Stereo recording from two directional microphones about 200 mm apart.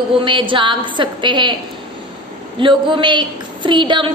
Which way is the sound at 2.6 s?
25° right (ahead or behind).